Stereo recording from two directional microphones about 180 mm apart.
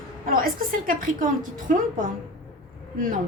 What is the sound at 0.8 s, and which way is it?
A woman's voice, 50° right (ahead or behind).